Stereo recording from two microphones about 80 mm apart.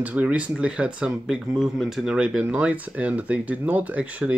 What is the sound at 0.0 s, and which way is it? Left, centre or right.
Speech, centre.